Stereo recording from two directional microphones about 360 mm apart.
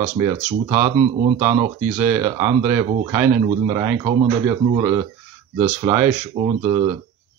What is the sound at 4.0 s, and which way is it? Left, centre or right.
Speech, centre.